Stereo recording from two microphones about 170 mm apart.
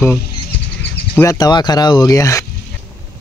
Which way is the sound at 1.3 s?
25° left (ahead or behind).